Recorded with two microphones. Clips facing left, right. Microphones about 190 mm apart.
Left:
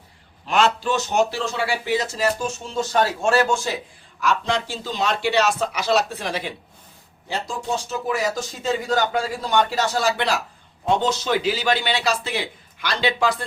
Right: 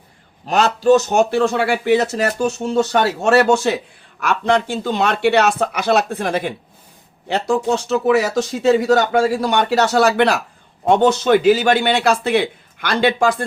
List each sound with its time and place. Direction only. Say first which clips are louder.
0.4 s speech: right 6 dB; 40° right (ahead or behind); by 3.8 s 70° right (ahead or behind)
4.2 s speech: right 5 dB; 60° right (ahead or behind)
7.3 s speech: right 9 dB; 70° right (ahead or behind); by 13.4 s 50° right (ahead or behind)